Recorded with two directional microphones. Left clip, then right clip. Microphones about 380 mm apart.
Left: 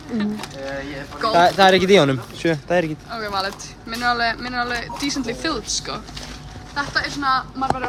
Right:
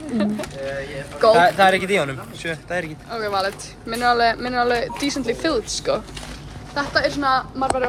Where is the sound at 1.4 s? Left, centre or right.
Left.